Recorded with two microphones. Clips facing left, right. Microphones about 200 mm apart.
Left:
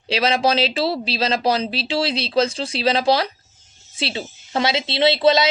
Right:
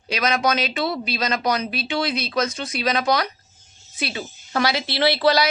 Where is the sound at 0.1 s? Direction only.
30° left (ahead or behind).